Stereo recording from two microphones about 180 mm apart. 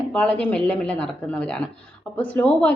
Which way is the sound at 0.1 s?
5° left (ahead or behind).